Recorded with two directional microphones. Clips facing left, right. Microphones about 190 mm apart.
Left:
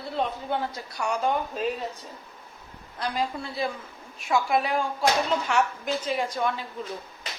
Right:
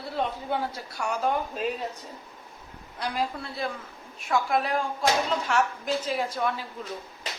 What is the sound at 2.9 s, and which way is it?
A woman's voice, 10° right (ahead or behind).